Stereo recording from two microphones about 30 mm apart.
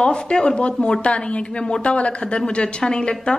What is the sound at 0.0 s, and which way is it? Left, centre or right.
A woman's voice, left.